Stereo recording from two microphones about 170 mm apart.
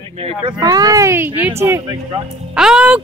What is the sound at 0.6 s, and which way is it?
Speech, 20° right (ahead or behind).